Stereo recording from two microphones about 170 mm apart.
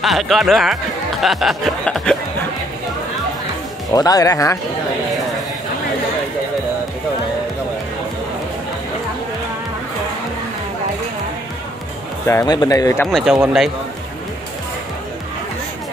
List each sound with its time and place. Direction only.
0.0 s speech: centre (ahead or behind)
3.9 s speech: 20° left (ahead or behind)
12.3 s speech: 20° left (ahead or behind)
13.0 s speech: centre (ahead or behind)